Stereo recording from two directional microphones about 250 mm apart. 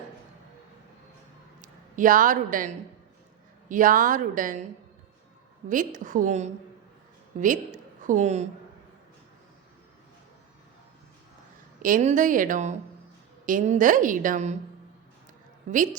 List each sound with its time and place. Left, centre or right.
1.6 s a woman's voice: right
5.6 s a woman's voice: right
11.8 s a woman's voice: right
15.7 s a woman's voice: right